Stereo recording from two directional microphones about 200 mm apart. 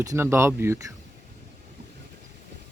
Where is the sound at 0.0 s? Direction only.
15° right (ahead or behind).